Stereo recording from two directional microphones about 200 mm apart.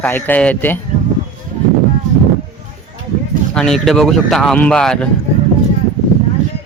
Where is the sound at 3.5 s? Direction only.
5° left (ahead or behind).